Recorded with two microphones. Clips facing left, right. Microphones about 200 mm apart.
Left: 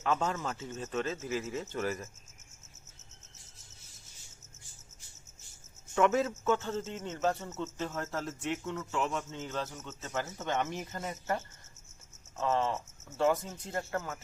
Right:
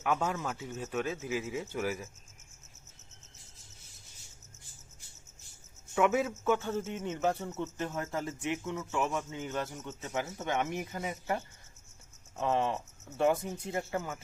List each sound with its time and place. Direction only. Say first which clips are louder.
0.0 s speech: even; 10° right (ahead or behind)
5.9 s speech: left 1 dB; 10° right (ahead or behind)